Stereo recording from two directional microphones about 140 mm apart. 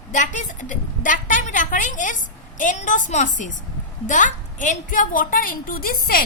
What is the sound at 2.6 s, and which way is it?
A woman's voice, 65° left (ahead or behind).